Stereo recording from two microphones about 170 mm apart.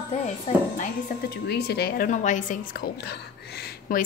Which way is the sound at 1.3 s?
75° left (ahead or behind).